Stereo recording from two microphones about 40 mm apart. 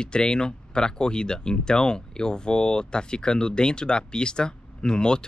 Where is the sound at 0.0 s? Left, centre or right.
Left.